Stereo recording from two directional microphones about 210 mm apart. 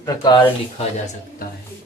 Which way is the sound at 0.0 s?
20° left (ahead or behind).